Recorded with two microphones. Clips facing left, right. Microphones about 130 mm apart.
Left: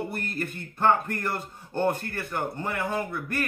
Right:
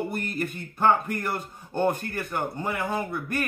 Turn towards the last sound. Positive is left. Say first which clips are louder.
# right 1 dB
turn(degrees=-15)  # may be behind; listen again after turning